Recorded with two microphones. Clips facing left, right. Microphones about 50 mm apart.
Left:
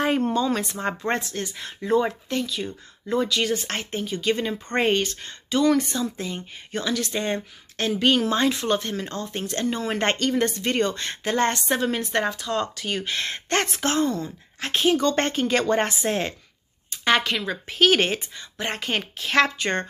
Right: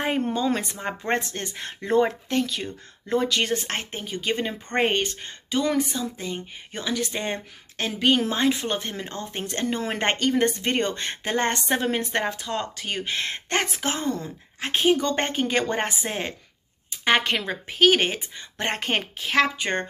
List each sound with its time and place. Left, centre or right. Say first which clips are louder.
0.9 s a woman's voice: left 3 dB; centre
1.2 s speech: left 1 dB; right
3.6 s a woman's voice: left 2 dB; right
5.5 s a woman's voice: left 3 dB; centre
6.7 s a woman's voice: left 2 dB; centre
13.6 s a woman's voice: left 4 dB; centre
14.1 s a woman's voice: left 2 dB; right
17.2 s speech: right 1 dB; right
17.7 s a woman's voice: even; centre
18.6 s speech: right 1 dB; right
19.1 s a woman's voice: left 2 dB; centre